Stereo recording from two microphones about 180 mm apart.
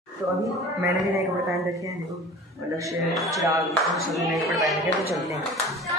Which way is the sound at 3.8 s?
Centre (ahead or behind).